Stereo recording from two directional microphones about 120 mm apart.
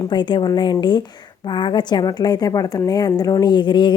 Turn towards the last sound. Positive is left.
turn(degrees=40)  # may be behind; listen again after turning